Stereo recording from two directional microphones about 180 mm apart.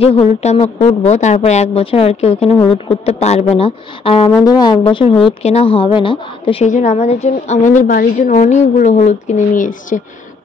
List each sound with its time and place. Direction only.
0.0 s speech: 35° left (ahead or behind)
6.7 s a woman's voice: 40° left (ahead or behind)